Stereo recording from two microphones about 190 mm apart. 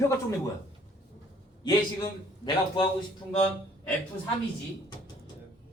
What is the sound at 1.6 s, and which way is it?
A man's voice, 20° left (ahead or behind).